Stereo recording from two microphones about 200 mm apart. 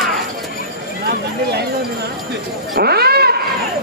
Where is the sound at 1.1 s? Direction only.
55° right (ahead or behind).